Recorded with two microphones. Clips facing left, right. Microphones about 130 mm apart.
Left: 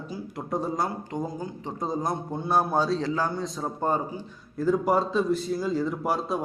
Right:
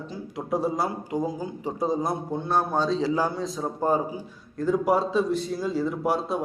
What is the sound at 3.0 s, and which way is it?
A man's voice, 10° right (ahead or behind).